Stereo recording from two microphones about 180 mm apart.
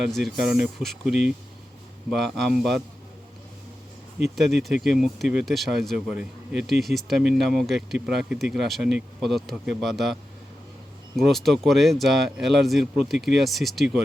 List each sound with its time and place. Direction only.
0.1 s speech: centre (ahead or behind)
4.2 s speech: centre (ahead or behind)
11.2 s speech: centre (ahead or behind)